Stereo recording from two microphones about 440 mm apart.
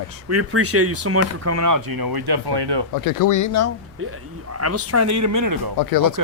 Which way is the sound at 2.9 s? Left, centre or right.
Left.